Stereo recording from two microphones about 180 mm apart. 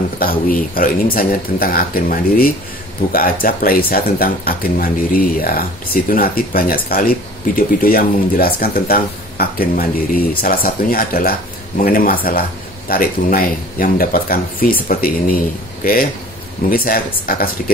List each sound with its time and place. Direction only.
0.2 s speech: 50° left (ahead or behind)